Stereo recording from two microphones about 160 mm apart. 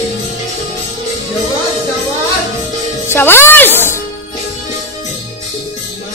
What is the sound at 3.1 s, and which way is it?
Music, 15° left (ahead or behind).